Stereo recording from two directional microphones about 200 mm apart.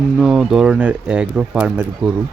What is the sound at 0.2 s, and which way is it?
Speech, centre (ahead or behind).